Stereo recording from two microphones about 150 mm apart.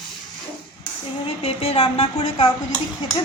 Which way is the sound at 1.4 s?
40° left (ahead or behind).